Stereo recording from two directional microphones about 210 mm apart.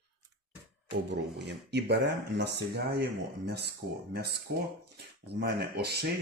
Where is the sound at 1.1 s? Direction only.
55° right (ahead or behind).